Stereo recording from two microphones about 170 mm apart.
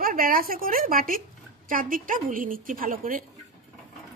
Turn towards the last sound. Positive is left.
turn(degrees=-55)  # may be behind; listen again after turning